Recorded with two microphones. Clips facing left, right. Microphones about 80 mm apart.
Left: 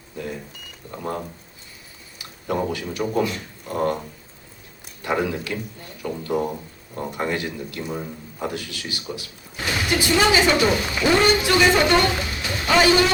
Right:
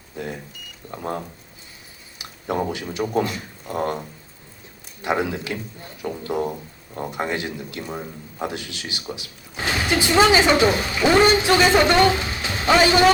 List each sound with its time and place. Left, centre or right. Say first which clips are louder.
2.1 s speech: even; right
5.0 s a man's voice: even; right